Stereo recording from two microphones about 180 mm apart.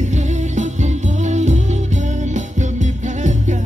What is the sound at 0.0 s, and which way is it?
Music, 40° right (ahead or behind).